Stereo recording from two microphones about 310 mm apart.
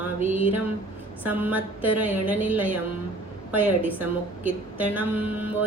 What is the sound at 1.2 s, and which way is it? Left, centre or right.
Mantra, centre.